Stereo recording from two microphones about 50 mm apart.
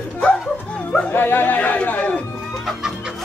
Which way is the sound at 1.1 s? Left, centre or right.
Left.